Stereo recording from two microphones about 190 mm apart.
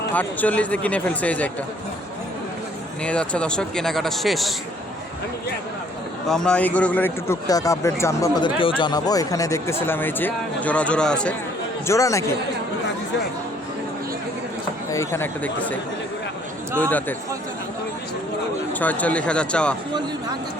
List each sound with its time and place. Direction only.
0.1 s speech: 10° left (ahead or behind)
3.0 s speech: 5° left (ahead or behind)
6.2 s speech: 5° left (ahead or behind)
11.9 s speech: 15° left (ahead or behind)
14.8 s speech: 15° left (ahead or behind)
18.7 s speech: 10° left (ahead or behind)